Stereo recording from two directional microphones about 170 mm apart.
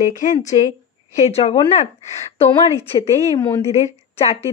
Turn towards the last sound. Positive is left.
turn(degrees=40)  # may be behind; listen again after turning